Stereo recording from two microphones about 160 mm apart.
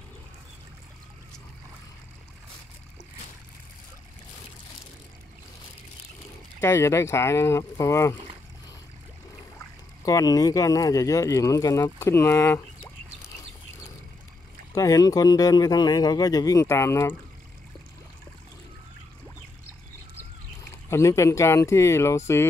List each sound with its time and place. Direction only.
6.6 s speech: 15° left (ahead or behind)
10.0 s speech: 20° left (ahead or behind)
14.7 s speech: 20° left (ahead or behind)
20.9 s speech: 20° left (ahead or behind)